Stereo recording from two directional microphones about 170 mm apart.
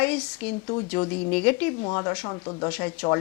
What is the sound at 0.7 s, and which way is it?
Speech, 25° left (ahead or behind).